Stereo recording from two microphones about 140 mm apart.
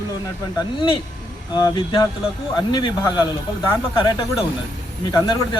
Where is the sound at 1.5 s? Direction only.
35° left (ahead or behind).